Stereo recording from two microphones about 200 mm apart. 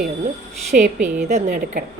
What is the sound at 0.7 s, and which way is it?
Speech, 45° right (ahead or behind).